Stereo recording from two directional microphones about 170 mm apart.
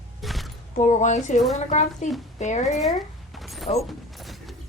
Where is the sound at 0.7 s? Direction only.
45° left (ahead or behind).